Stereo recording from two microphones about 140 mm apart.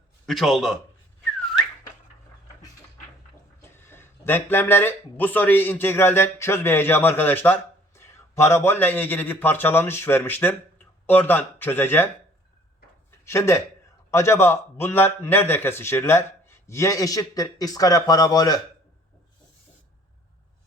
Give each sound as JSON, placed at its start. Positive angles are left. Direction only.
{"t": 0.3, "sound": "a man's voice", "side_deg": 0}
{"t": 3.6, "sound": "speech", "side_deg": 15}
{"t": 13.1, "sound": "a sound", "side_deg": 20}
{"t": 14.1, "sound": "a man's voice", "side_deg": 20}